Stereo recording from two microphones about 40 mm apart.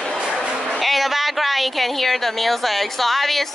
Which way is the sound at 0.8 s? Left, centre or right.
Centre.